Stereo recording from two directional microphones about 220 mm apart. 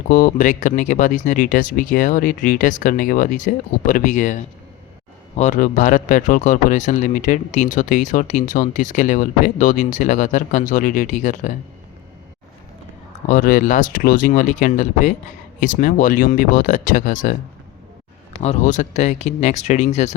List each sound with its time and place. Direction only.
0.1 s speech: 35° left (ahead or behind)
13.2 s speech: 40° left (ahead or behind)
18.4 s speech: 30° left (ahead or behind)